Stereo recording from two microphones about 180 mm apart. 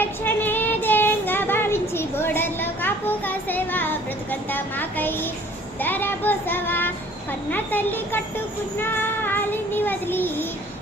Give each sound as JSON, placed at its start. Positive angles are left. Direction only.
{"t": 0.0, "sound": "child singing", "side_deg": 10}